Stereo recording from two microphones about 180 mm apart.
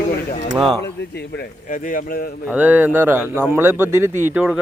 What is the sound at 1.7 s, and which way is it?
Speech, 50° left (ahead or behind).